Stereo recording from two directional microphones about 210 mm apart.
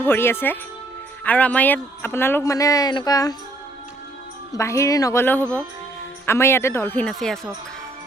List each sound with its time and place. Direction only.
0.0 s speech: 10° left (ahead or behind)
4.5 s speech: 15° left (ahead or behind)